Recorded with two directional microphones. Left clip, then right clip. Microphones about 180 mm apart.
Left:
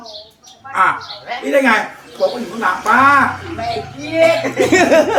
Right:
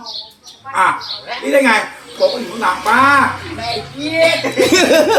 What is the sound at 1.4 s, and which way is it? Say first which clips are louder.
Speech: right 1 dB; centre (ahead or behind).